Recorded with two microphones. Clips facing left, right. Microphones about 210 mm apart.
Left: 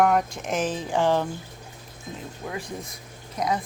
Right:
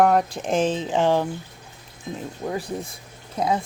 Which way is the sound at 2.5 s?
30° right (ahead or behind).